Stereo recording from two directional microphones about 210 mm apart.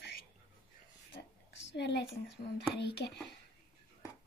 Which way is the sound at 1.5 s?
55° left (ahead or behind).